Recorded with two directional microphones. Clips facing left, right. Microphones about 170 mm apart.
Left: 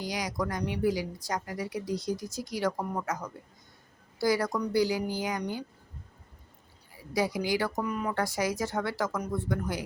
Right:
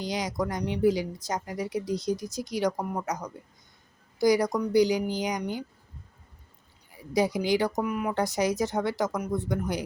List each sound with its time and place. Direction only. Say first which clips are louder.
0.0 s a woman's voice: right 3 dB; 25° right (ahead or behind)
6.9 s speech: right 4 dB; 20° right (ahead or behind)
7.9 s a woman's voice: right 2 dB; 10° right (ahead or behind)
8.1 s speech: right 3 dB; 20° right (ahead or behind)